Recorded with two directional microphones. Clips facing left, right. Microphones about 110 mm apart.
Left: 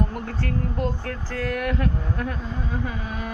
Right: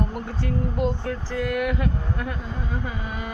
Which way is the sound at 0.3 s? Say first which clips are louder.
Even; 15° right (ahead or behind).